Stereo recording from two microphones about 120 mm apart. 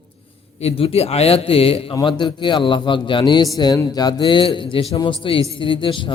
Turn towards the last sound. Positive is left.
turn(degrees=45)  # may be behind; listen again after turning